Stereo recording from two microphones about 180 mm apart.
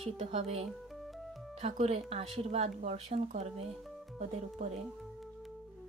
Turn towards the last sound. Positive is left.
turn(degrees=-40)  # may be behind; listen again after turning